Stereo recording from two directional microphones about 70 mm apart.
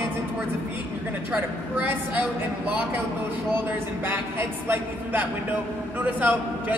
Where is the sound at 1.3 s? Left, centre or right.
Right.